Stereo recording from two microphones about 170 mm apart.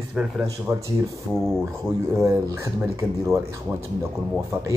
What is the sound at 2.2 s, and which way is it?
Speech, 15° right (ahead or behind).